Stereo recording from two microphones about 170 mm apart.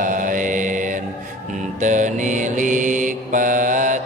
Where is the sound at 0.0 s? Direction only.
55° right (ahead or behind).